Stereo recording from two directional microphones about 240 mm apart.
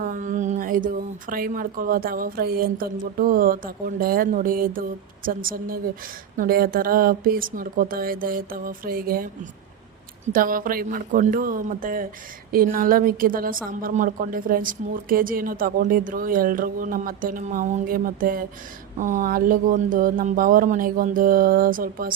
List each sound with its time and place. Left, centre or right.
0.0 s a sound: right
1.3 s a woman's voice: right
10.3 s a woman's voice: right